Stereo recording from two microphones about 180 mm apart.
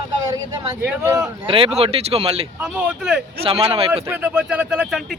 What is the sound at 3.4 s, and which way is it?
Speech, 30° right (ahead or behind).